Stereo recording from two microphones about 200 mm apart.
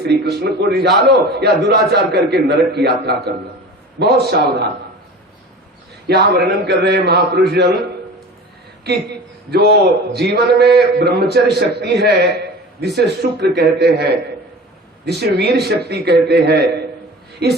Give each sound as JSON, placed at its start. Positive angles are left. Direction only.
{"t": 0.0, "sound": "a man's voice", "side_deg": -55}
{"t": 6.1, "sound": "a man's voice", "side_deg": -55}
{"t": 8.8, "sound": "a man's voice", "side_deg": -55}